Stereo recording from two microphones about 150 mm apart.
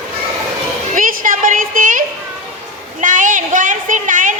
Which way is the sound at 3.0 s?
60° right (ahead or behind).